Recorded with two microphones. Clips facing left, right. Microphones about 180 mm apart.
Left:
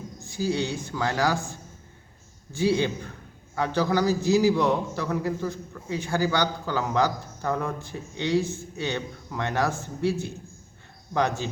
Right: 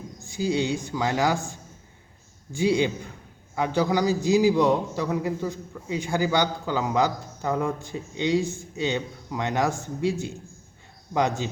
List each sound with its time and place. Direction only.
0.3 s a man's voice: 15° right (ahead or behind)
2.5 s a man's voice: 15° right (ahead or behind)